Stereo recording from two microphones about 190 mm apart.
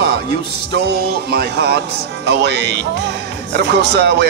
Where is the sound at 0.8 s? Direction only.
55° right (ahead or behind).